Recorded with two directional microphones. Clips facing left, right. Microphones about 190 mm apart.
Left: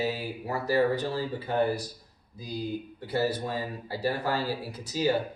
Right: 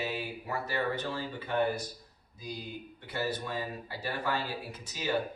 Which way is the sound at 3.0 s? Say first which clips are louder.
Left 6 dB; 35° left (ahead or behind).